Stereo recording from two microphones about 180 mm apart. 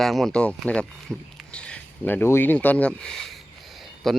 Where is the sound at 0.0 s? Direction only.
Centre (ahead or behind).